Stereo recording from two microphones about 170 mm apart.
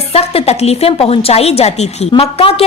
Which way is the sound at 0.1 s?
35° left (ahead or behind).